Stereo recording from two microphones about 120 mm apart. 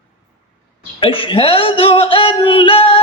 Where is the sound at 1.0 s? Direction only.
50° left (ahead or behind).